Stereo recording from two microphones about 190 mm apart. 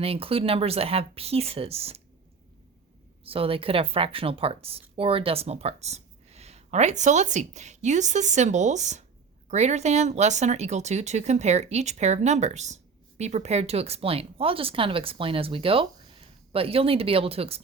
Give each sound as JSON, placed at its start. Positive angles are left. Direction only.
{"t": 0.0, "sound": "speech", "side_deg": -30}
{"t": 3.2, "sound": "speech", "side_deg": -30}